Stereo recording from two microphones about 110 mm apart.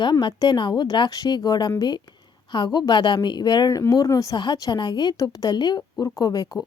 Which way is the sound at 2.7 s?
45° left (ahead or behind).